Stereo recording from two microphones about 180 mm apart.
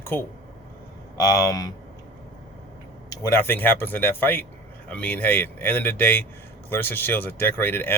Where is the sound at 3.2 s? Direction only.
15° left (ahead or behind).